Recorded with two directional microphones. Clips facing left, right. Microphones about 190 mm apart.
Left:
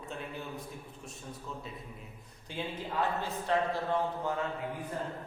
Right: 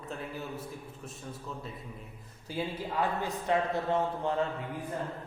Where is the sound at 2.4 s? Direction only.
5° right (ahead or behind); by 4.3 s 25° right (ahead or behind).